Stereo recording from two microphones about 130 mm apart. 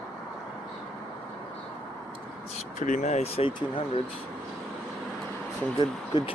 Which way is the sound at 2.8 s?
70° left (ahead or behind).